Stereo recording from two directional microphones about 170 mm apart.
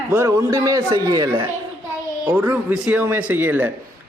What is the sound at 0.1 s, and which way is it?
A man's voice, 15° right (ahead or behind).